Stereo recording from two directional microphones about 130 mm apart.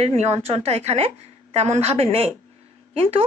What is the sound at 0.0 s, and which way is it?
A woman's voice, 55° right (ahead or behind).